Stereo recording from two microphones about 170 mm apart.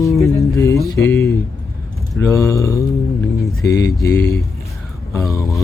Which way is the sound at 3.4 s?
20° left (ahead or behind).